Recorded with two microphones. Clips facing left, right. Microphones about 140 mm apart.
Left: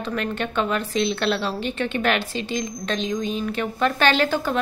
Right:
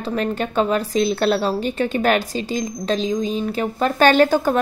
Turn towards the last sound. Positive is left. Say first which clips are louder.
# right 6 dB
turn(degrees=-45)  # may be behind; listen again after turning